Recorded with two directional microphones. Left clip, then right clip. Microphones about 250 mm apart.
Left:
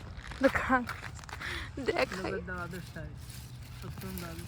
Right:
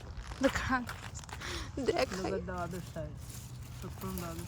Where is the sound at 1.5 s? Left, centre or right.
Centre.